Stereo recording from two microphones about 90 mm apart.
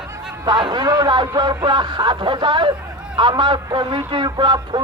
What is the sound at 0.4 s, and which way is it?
A man's voice, 55° right (ahead or behind).